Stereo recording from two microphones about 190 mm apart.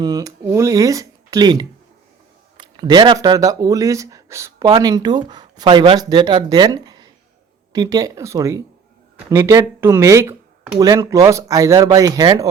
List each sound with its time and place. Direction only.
0.0 s speech: 20° right (ahead or behind)